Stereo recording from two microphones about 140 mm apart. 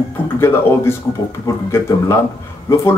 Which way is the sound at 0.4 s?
15° left (ahead or behind).